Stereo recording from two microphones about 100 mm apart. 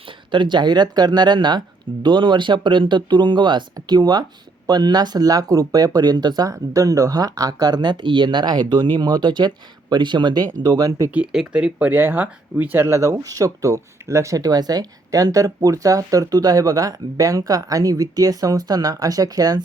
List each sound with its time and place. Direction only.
0.3 s speech: 50° right (ahead or behind); by 11.1 s 35° right (ahead or behind)
11.1 s speech: 10° right (ahead or behind); by 19.6 s 40° right (ahead or behind)